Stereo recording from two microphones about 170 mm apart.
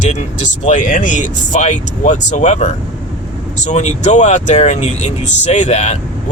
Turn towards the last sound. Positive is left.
turn(degrees=40)  # may be behind; listen again after turning